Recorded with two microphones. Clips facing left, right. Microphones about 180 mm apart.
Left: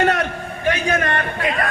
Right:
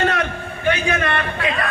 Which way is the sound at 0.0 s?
45° left (ahead or behind).